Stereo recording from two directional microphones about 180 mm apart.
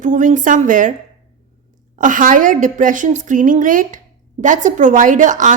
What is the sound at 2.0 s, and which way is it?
A woman's voice, 45° right (ahead or behind).